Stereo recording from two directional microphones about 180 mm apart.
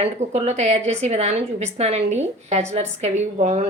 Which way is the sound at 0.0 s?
35° right (ahead or behind).